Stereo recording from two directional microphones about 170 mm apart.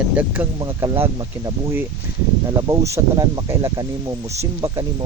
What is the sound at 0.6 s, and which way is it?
Speech, 20° right (ahead or behind).